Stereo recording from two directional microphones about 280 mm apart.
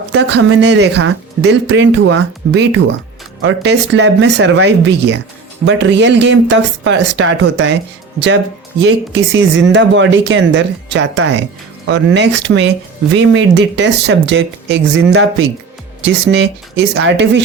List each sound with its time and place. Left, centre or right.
0.1 s speech: right
8.8 s speech: right